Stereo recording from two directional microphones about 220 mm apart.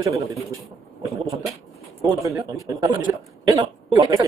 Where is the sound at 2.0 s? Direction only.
15° right (ahead or behind).